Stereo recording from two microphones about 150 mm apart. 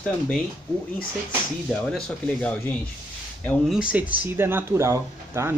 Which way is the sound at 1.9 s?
5° left (ahead or behind).